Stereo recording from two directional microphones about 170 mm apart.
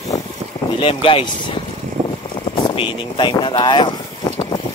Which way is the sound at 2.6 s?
30° left (ahead or behind).